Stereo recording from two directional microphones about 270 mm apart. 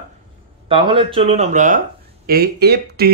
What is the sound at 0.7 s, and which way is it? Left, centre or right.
Speech, centre.